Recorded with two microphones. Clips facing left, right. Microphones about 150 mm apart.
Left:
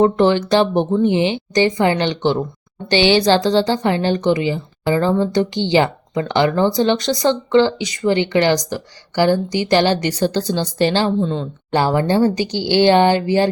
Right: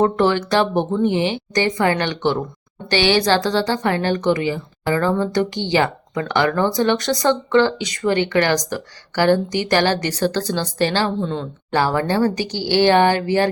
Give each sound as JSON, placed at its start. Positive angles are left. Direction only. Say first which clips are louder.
{"t": 0.0, "sound": "a woman's voice", "louder": "left 3 dB", "side_deg": 20}